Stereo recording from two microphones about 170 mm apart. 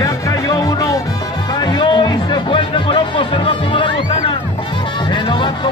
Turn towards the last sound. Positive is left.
turn(degrees=30)  # may be behind; listen again after turning